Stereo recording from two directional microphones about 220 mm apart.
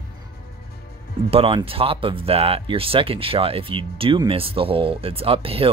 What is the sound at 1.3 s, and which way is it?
Speech, 25° right (ahead or behind).